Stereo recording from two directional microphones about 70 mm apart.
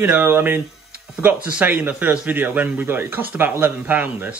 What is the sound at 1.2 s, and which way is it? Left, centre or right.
Speech, right.